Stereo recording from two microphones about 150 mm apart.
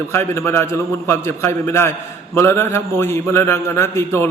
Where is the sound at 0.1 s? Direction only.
15° left (ahead or behind).